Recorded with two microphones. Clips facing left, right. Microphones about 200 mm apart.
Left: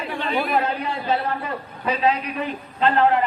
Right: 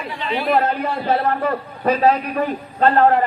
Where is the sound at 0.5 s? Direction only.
50° right (ahead or behind).